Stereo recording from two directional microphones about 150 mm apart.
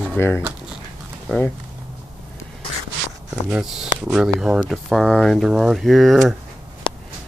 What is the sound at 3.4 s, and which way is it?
Speech, 5° right (ahead or behind).